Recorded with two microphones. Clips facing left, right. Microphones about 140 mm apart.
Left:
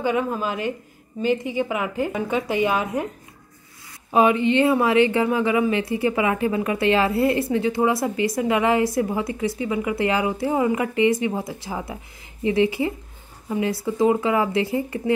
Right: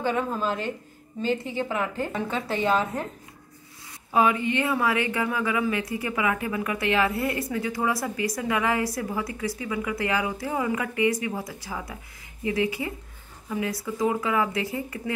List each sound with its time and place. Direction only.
0.0 s a woman's voice: 10° left (ahead or behind)
4.1 s speech: 20° left (ahead or behind)